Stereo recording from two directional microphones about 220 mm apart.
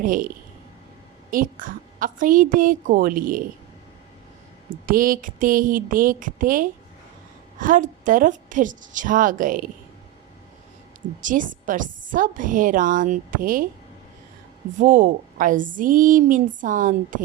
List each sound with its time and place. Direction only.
0.0 s a woman's voice: 40° right (ahead or behind)
1.3 s a woman's voice: 40° right (ahead or behind)
4.7 s a woman's voice: 40° right (ahead or behind)
11.2 s a woman's voice: 35° right (ahead or behind)
14.8 s a woman's voice: 35° right (ahead or behind)